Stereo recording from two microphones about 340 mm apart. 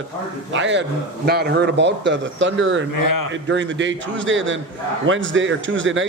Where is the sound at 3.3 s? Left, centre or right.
Right.